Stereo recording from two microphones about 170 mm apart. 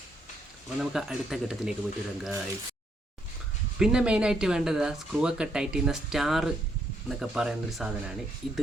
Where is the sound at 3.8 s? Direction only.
5° right (ahead or behind).